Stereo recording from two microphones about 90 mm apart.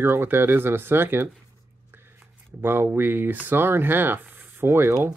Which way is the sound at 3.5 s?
25° right (ahead or behind).